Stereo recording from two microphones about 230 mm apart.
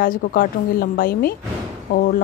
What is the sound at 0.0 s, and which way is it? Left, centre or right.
A woman's voice, left.